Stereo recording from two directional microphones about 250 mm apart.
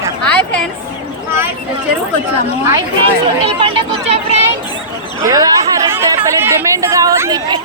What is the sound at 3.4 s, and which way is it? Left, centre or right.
Speech, right.